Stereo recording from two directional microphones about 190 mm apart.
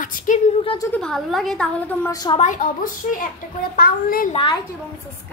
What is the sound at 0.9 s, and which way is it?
A woman's voice, centre (ahead or behind).